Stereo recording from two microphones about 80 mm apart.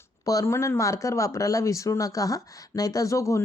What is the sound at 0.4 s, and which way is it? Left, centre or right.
Speech, left.